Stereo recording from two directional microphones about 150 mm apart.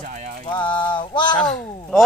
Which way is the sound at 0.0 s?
55° right (ahead or behind).